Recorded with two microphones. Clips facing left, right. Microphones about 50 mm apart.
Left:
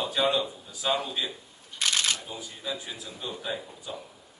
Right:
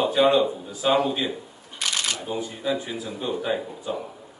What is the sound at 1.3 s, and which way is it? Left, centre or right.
Camera, right.